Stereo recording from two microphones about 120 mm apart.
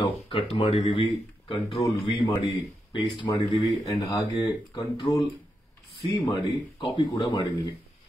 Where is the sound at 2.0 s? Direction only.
45° left (ahead or behind).